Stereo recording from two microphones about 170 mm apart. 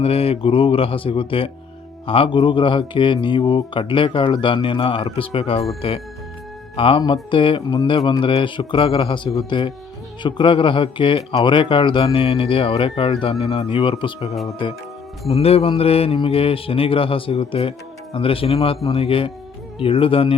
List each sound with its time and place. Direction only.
0.0 s a man's voice: 35° left (ahead or behind)